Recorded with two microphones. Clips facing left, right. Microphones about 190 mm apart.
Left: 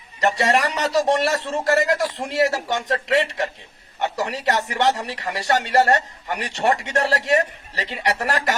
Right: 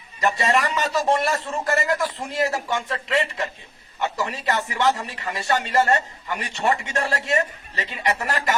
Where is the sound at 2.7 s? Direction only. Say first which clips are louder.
Left 3 dB; 70° left (ahead or behind).